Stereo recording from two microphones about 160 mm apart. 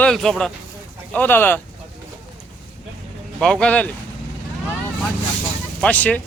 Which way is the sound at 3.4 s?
5° left (ahead or behind).